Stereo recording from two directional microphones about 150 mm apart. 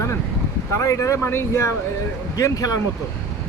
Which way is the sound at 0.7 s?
20° left (ahead or behind).